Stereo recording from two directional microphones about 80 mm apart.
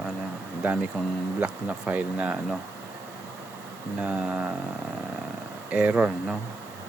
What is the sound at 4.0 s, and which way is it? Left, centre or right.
Speech, centre.